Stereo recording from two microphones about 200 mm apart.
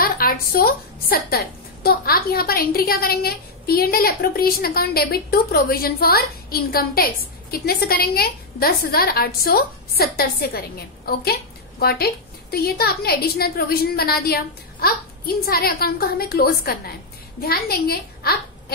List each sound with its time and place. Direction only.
0.0 s a woman's voice: 45° left (ahead or behind)
11.8 s a woman's voice: 50° left (ahead or behind)